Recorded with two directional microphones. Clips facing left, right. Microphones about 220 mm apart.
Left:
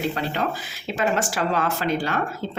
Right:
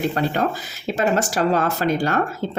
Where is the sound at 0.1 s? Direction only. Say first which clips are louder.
Right 4 dB; 45° right (ahead or behind).